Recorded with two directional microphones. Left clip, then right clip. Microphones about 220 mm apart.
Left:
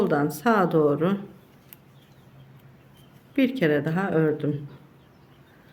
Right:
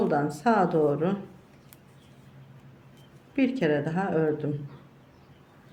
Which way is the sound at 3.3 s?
20° left (ahead or behind).